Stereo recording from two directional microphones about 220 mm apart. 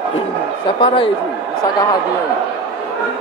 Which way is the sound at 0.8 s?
25° left (ahead or behind).